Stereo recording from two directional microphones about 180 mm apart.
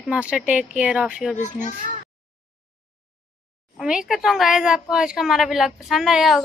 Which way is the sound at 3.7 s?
5° right (ahead or behind).